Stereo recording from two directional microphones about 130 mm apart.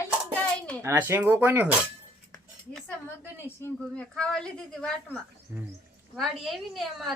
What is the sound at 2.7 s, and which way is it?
Speech, 5° left (ahead or behind).